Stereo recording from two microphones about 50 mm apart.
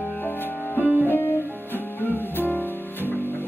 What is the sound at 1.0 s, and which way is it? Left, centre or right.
Music, left.